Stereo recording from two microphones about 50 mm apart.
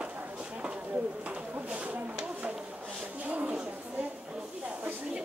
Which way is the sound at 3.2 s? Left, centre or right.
Right.